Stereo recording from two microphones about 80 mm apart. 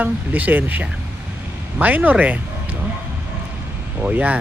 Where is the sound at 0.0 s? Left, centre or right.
Right.